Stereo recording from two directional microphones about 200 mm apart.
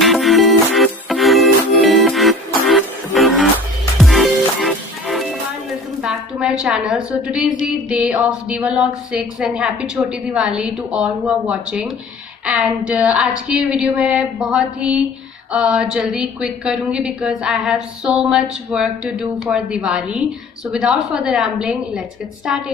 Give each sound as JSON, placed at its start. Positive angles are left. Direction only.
{"t": 0.0, "sound": "music", "side_deg": 0}
{"t": 5.9, "sound": "a sound", "side_deg": -5}
{"t": 6.9, "sound": "a woman's voice", "side_deg": -5}